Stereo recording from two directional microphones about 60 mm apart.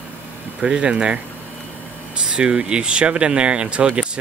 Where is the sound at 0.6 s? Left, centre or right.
Centre.